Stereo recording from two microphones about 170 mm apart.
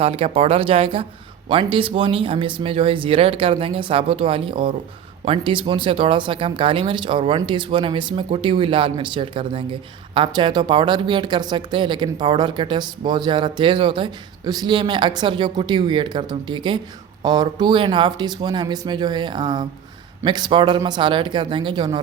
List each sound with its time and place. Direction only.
0.0 s speech: 35° right (ahead or behind)